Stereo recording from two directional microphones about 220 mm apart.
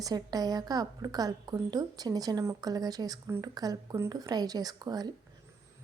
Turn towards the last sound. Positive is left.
turn(degrees=-20)  # may be behind; listen again after turning